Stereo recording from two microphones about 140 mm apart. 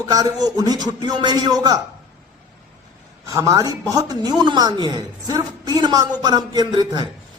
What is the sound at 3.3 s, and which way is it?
A man's voice, 25° right (ahead or behind).